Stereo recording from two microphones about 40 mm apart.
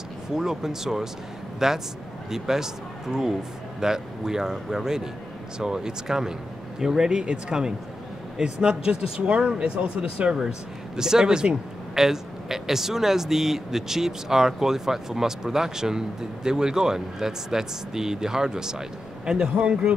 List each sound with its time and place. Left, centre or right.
0.3 s a man's voice: centre; by 10.3 s right
11.0 s a man's voice: centre